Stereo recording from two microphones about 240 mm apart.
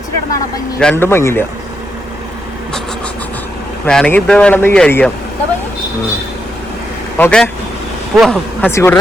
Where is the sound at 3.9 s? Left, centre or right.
Centre.